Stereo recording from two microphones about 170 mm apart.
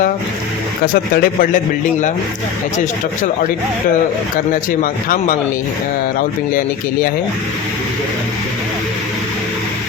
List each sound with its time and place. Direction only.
1.1 s speech: 55° left (ahead or behind)
4.8 s speech: 55° left (ahead or behind)